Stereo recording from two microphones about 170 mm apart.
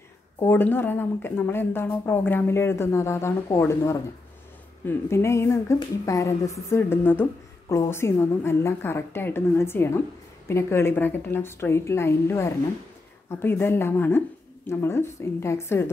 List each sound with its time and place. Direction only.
0.4 s a woman's voice: 10° left (ahead or behind)